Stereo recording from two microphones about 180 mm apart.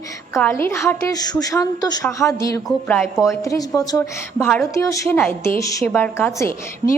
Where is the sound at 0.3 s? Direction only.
15° left (ahead or behind).